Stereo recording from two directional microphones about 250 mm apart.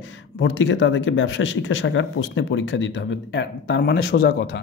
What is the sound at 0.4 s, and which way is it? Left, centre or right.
Speech, left.